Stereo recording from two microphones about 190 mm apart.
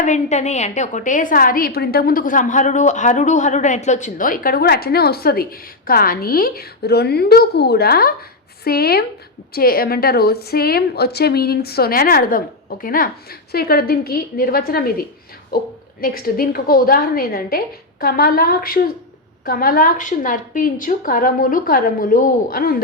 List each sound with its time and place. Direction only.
0.0 s a woman's voice: 40° left (ahead or behind)